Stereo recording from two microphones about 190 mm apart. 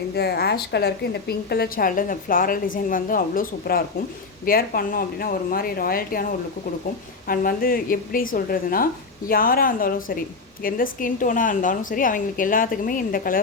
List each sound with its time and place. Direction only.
0.1 s a woman's voice: 60° left (ahead or behind)
7.3 s a woman's voice: 50° left (ahead or behind)